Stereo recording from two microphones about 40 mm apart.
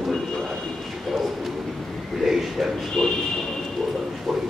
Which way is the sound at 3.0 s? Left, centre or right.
Centre.